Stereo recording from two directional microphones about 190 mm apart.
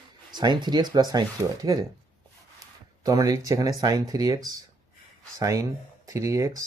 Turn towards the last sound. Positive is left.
turn(degrees=-15)  # may be behind; listen again after turning